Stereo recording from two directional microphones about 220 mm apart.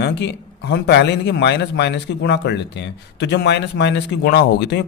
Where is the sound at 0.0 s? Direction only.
50° left (ahead or behind).